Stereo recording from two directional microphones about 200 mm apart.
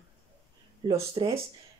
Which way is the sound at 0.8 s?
30° right (ahead or behind).